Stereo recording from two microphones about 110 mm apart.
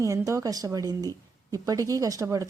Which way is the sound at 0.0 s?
30° right (ahead or behind).